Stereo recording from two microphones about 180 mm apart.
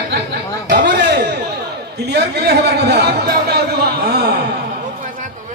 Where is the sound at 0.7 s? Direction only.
70° right (ahead or behind).